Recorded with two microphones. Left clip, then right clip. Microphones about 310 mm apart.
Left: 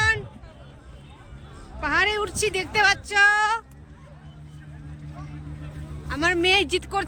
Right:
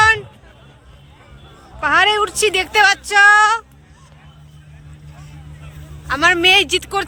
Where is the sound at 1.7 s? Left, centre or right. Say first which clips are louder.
Right 9 dB; centre.